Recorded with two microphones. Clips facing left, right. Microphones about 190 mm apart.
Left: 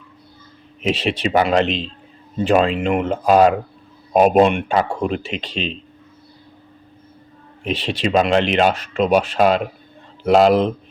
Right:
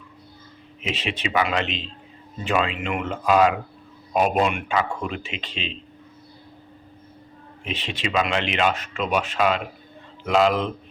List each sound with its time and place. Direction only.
0.8 s speech: 35° left (ahead or behind)
7.6 s speech: 35° left (ahead or behind)